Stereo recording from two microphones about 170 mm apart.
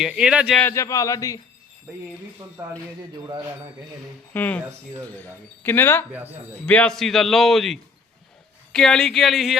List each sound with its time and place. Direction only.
0.0 s a man's voice: 5° right (ahead or behind)
0.6 s a man's voice: 15° left (ahead or behind)
2.6 s speech: 20° right (ahead or behind)
4.4 s speech: 10° left (ahead or behind)
6.1 s speech: 10° right (ahead or behind)
6.7 s a man's voice: 5° left (ahead or behind)